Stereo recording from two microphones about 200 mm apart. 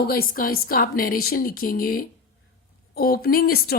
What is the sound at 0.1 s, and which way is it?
Speech, 45° left (ahead or behind).